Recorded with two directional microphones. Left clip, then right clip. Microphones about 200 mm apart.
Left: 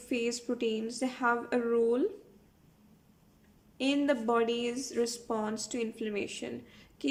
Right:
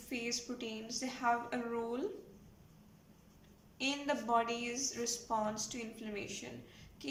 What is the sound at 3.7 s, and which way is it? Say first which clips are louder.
A woman's voice: left 7 dB; 45° left (ahead or behind).